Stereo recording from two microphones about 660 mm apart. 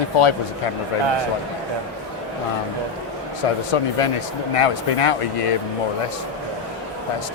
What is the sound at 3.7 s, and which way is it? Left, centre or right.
Speech, left.